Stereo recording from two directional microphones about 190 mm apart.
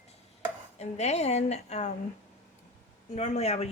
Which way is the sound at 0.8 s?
35° left (ahead or behind).